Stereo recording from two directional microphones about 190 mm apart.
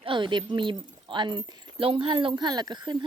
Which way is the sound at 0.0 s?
25° right (ahead or behind).